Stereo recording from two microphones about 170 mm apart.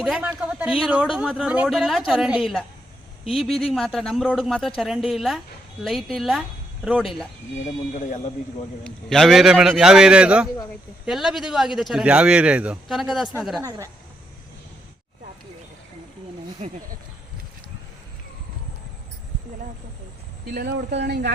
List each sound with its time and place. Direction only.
0.0 s speech: 5° right (ahead or behind)
7.9 s a man's voice: 50° left (ahead or behind)
8.8 s speech: 5° left (ahead or behind)
13.6 s a woman's voice: 20° right (ahead or behind)
20.5 s speech: 70° right (ahead or behind)